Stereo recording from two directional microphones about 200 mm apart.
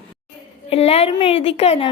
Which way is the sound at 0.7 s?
30° left (ahead or behind).